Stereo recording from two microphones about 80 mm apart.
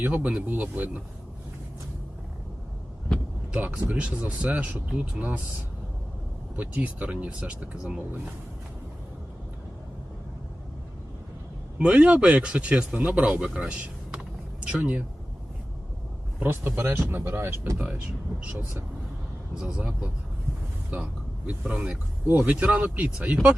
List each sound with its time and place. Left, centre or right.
0.0 s speech: centre
3.5 s speech: centre
6.6 s speech: centre
11.8 s speech: centre
16.4 s speech: right
19.5 s speech: centre